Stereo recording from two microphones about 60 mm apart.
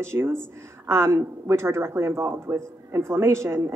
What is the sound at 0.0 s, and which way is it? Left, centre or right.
A woman's voice, right.